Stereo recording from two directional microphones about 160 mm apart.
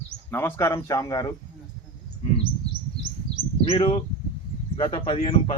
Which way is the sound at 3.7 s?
35° left (ahead or behind).